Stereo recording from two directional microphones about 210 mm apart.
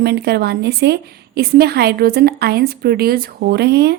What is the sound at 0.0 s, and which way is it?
A woman's voice, 50° right (ahead or behind).